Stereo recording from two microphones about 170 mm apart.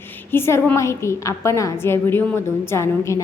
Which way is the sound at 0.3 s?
15° left (ahead or behind).